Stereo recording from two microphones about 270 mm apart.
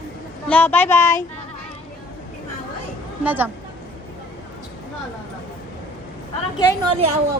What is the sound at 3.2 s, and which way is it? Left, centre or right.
Speech, centre.